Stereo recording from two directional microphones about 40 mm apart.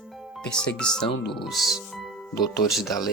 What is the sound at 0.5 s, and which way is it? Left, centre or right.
Speech, centre.